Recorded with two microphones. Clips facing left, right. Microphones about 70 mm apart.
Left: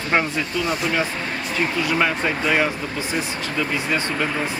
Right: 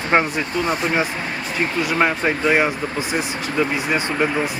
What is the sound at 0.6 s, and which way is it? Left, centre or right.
Speech, right.